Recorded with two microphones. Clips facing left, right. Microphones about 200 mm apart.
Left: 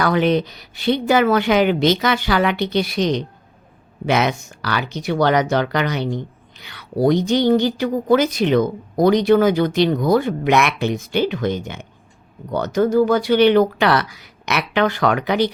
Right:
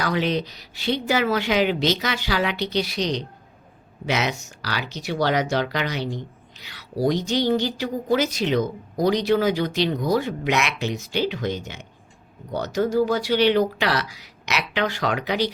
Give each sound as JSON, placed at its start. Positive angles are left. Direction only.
{"t": 0.0, "sound": "a woman's voice", "side_deg": 55}